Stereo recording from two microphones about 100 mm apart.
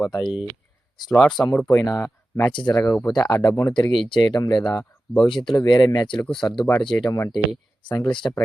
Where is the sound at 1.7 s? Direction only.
35° left (ahead or behind).